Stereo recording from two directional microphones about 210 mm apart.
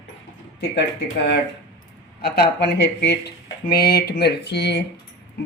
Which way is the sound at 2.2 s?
50° left (ahead or behind).